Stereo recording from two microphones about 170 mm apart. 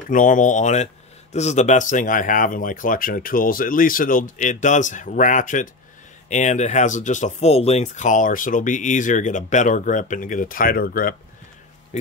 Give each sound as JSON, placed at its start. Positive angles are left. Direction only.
{"t": 0.1, "sound": "speech", "side_deg": 50}
{"t": 11.9, "sound": "speech", "side_deg": 40}